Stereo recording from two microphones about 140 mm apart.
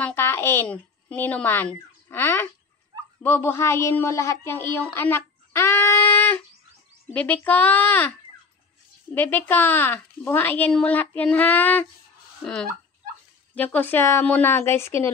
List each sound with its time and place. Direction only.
0.0 s a child's voice: 15° left (ahead or behind)
9.1 s a woman's voice: 15° left (ahead or behind)
13.6 s a woman's voice: 10° left (ahead or behind)